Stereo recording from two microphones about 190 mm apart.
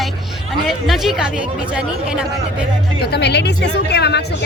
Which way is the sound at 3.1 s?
60° left (ahead or behind).